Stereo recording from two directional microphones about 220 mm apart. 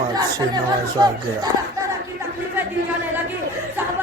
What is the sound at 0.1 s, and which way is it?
Speech, 20° right (ahead or behind).